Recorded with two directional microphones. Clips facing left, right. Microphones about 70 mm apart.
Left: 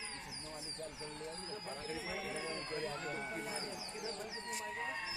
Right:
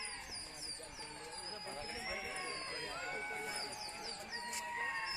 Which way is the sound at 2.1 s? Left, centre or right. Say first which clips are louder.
Left 2 dB; centre.